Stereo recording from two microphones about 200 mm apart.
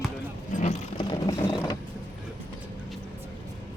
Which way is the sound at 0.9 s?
20° left (ahead or behind).